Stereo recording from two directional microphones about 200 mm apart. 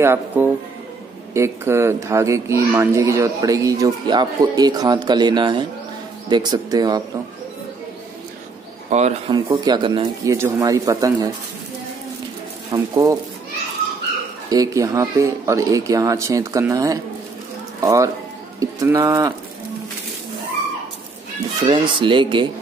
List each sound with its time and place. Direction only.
0.0 s a child's voice: 10° right (ahead or behind)
8.9 s speech: 35° right (ahead or behind)
9.3 s a child's voice: 20° right (ahead or behind)
12.7 s a child's voice: 15° right (ahead or behind)
14.5 s a child's voice: 15° right (ahead or behind)
18.6 s bird: 15° right (ahead or behind)
21.6 s speech: 25° right (ahead or behind)